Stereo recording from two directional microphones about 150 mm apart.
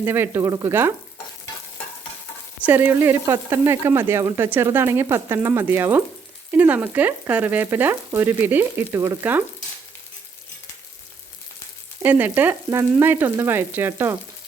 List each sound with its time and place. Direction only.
0.0 s frying: 15° right (ahead or behind)
2.6 s frying: 10° right (ahead or behind)
12.0 s frying: 15° right (ahead or behind)